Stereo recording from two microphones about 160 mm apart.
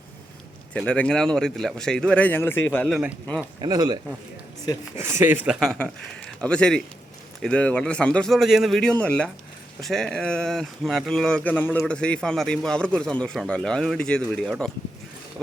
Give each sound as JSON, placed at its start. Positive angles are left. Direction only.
{"t": 0.8, "sound": "speech", "side_deg": 5}
{"t": 3.6, "sound": "speech", "side_deg": -25}
{"t": 5.5, "sound": "speech", "side_deg": 0}